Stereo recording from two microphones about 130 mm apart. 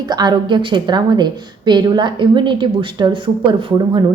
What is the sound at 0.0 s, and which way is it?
A woman's voice, 35° right (ahead or behind).